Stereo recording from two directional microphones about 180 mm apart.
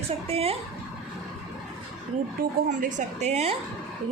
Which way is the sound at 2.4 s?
45° right (ahead or behind).